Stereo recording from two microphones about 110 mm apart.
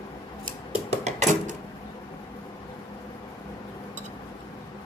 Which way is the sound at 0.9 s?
90° right.